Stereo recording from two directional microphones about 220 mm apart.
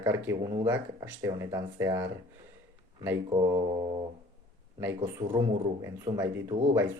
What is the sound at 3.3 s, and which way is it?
Speech, 20° right (ahead or behind).